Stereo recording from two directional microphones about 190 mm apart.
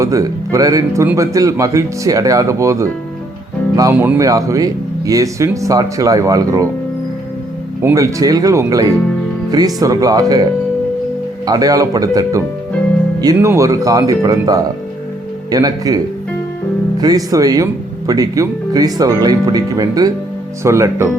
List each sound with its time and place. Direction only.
0.0 s speech: 15° right (ahead or behind)
7.8 s speech: 15° right (ahead or behind)
11.4 s speech: 20° right (ahead or behind)
17.0 s speech: 20° right (ahead or behind)